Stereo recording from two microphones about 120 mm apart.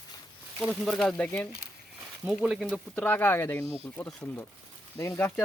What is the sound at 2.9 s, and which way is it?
Speech, 15° left (ahead or behind).